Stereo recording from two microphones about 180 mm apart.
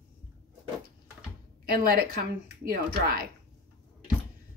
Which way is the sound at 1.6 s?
55° right (ahead or behind).